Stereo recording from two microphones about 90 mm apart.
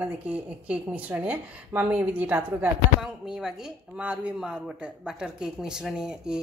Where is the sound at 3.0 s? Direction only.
5° right (ahead or behind).